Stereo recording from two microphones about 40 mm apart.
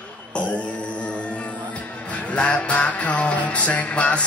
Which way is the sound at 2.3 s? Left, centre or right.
Left.